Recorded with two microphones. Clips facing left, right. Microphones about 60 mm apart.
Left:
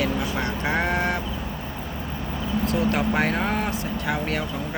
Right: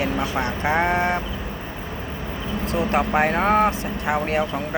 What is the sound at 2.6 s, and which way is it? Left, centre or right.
Speech, right.